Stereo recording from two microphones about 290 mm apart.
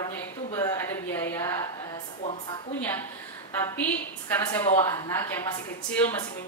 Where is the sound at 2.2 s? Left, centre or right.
Left.